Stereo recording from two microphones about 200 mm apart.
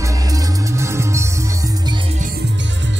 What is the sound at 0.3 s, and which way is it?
Music, 15° right (ahead or behind).